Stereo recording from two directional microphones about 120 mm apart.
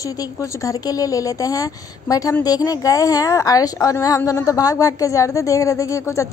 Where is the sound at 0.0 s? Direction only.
25° left (ahead or behind).